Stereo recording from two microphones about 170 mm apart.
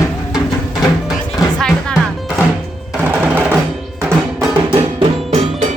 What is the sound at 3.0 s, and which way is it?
Percussion, 10° right (ahead or behind).